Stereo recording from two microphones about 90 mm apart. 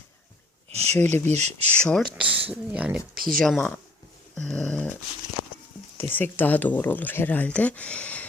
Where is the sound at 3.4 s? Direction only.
5° left (ahead or behind).